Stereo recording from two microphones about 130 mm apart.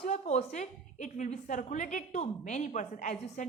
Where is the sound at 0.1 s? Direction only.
55° left (ahead or behind); by 2.0 s 85° left.